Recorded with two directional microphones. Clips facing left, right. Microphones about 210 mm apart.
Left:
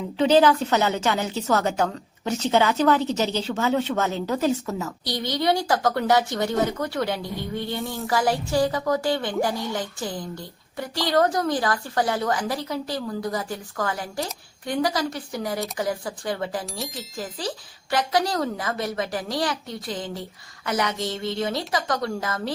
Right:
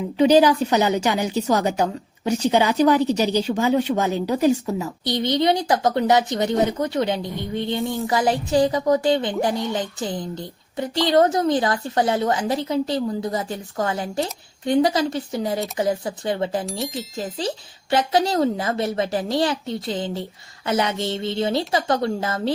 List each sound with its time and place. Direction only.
0.2 s a woman's voice: 15° right (ahead or behind)
16.6 s speech: centre (ahead or behind)
17.2 s a woman's voice: 25° right (ahead or behind)